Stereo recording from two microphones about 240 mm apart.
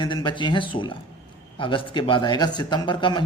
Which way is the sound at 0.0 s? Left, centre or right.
Centre.